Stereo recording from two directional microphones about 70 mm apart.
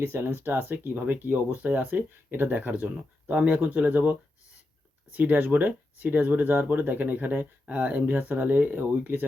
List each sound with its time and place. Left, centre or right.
0.0 s speech: right